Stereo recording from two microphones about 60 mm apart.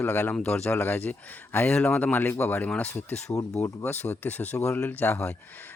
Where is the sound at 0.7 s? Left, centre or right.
Left.